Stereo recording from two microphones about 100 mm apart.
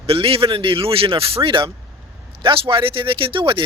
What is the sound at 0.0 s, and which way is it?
Speech, 65° right (ahead or behind).